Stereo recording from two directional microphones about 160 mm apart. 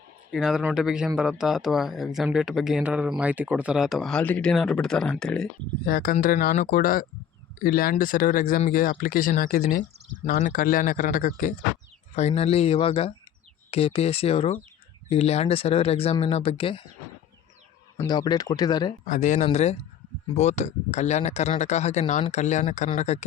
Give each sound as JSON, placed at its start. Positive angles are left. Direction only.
{"t": 0.3, "sound": "speech", "side_deg": -5}
{"t": 5.8, "sound": "speech", "side_deg": 65}
{"t": 12.1, "sound": "speech", "side_deg": 40}
{"t": 17.9, "sound": "speech", "side_deg": 25}
{"t": 19.0, "sound": "speech", "side_deg": 50}